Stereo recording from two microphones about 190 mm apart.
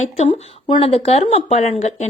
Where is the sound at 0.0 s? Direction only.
30° left (ahead or behind).